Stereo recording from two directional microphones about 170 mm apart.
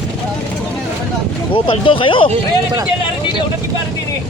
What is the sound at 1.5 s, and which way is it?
Speech, 30° left (ahead or behind).